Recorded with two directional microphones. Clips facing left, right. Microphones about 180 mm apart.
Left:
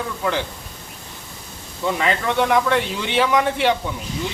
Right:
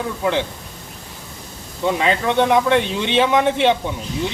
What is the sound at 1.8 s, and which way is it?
A man's voice, 20° right (ahead or behind).